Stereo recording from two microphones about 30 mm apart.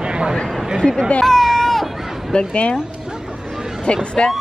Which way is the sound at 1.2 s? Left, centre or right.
Centre.